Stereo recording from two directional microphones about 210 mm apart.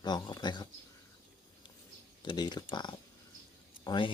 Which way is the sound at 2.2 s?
20° left (ahead or behind).